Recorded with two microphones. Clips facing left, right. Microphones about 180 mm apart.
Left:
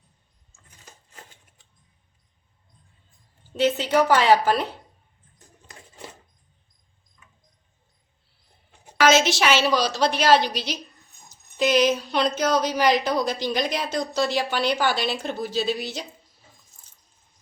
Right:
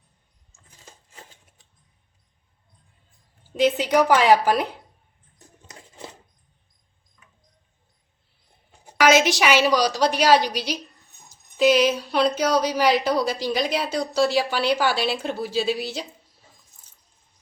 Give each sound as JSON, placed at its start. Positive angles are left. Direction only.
{"t": 3.5, "sound": "speech", "side_deg": -10}
{"t": 9.0, "sound": "speech", "side_deg": -15}